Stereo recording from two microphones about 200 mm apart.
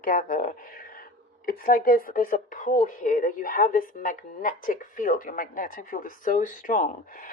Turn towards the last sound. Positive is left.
turn(degrees=40)  # may be behind; listen again after turning